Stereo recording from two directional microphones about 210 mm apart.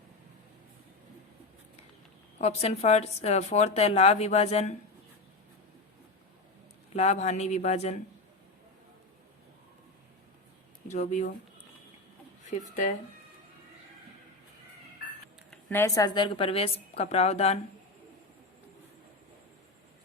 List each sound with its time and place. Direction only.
2.4 s a woman's voice: 30° left (ahead or behind)
6.9 s a woman's voice: 30° left (ahead or behind)
10.8 s a woman's voice: 35° left (ahead or behind)
12.4 s speech: 35° left (ahead or behind)
15.7 s a woman's voice: 15° left (ahead or behind); by 17.6 s 30° left (ahead or behind)